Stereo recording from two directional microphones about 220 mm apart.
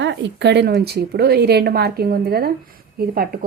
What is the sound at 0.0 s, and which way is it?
Speech, 55° right (ahead or behind).